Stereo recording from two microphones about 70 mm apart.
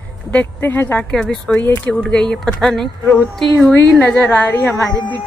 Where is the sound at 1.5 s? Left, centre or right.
Left.